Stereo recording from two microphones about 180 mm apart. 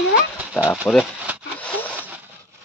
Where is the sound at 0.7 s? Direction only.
Centre (ahead or behind).